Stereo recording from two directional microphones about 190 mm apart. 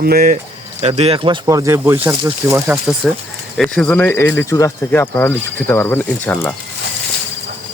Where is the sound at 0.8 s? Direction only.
35° right (ahead or behind).